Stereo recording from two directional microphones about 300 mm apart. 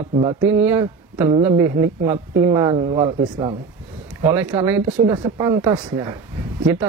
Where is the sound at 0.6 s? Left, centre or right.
Centre.